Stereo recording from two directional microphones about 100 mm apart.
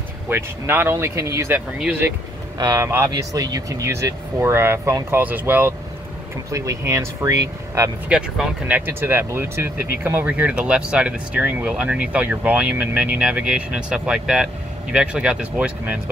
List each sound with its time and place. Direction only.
0.3 s speech: 20° right (ahead or behind)
2.6 s speech: 35° right (ahead or behind); by 5.8 s 20° right (ahead or behind)
6.5 s speech: 30° right (ahead or behind)
8.1 s speech: 10° right (ahead or behind)